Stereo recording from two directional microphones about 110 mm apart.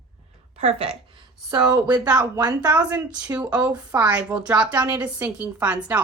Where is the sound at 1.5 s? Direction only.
40° right (ahead or behind).